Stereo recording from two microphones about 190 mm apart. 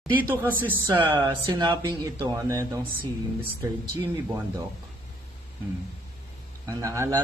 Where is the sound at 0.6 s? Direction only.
10° right (ahead or behind).